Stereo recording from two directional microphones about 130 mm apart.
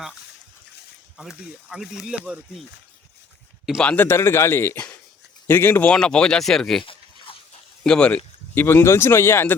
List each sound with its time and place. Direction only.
1.1 s speech: centre (ahead or behind)
3.8 s speech: 10° left (ahead or behind)
7.9 s speech: 10° left (ahead or behind)